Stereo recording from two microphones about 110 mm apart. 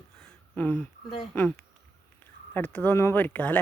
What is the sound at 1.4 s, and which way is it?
Speech, 10° left (ahead or behind).